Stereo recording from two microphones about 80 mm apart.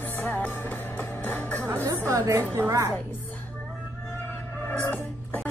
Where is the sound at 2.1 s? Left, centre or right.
Right.